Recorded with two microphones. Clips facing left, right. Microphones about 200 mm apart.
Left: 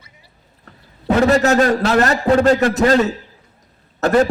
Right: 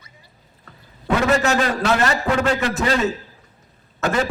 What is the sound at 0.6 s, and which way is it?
A man's voice, 35° left (ahead or behind).